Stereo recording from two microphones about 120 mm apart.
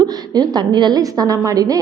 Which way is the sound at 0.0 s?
35° right (ahead or behind).